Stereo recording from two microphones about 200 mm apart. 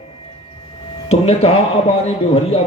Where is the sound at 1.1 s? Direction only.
30° left (ahead or behind).